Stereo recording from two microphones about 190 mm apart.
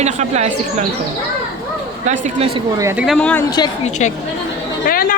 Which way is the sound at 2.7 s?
15° right (ahead or behind).